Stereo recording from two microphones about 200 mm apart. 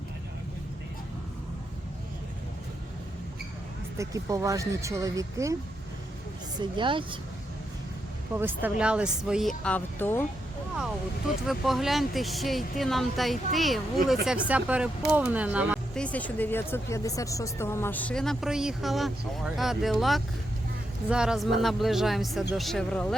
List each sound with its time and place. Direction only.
3.9 s speech: 15° right (ahead or behind)
6.6 s speech: 25° right (ahead or behind)
8.4 s speech: 10° right (ahead or behind)
9.6 s speech: 10° left (ahead or behind)
11.4 s speech: centre (ahead or behind)
16.0 s speech: 5° left (ahead or behind)